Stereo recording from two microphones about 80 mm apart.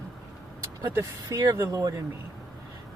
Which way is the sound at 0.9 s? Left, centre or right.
Right.